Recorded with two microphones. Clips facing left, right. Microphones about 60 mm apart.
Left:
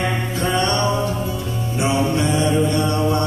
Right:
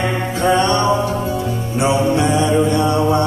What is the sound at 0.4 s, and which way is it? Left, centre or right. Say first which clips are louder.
Music: right 5 dB; right.